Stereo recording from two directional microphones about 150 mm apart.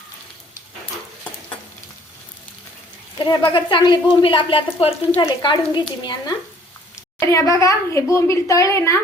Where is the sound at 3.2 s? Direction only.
35° left (ahead or behind).